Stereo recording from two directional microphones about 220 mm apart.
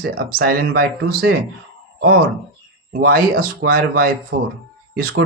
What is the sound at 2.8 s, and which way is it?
Speech, 45° right (ahead or behind).